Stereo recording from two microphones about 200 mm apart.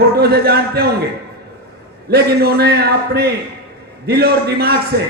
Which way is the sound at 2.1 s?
50° right (ahead or behind).